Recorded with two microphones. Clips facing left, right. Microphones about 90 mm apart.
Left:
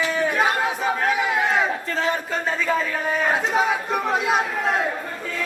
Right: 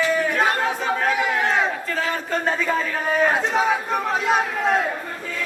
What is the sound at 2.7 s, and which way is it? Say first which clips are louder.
A man's voice: even; centre (ahead or behind).